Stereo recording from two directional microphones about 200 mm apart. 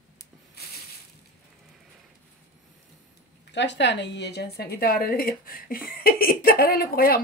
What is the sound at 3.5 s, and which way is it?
A woman's voice, 60° left (ahead or behind).